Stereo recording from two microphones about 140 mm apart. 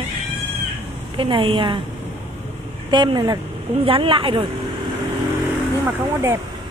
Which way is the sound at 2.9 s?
30° right (ahead or behind).